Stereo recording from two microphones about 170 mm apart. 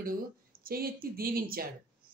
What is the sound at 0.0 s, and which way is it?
Speech, 60° right (ahead or behind).